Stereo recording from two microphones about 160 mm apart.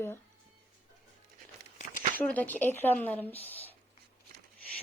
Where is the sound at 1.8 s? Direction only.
50° left (ahead or behind).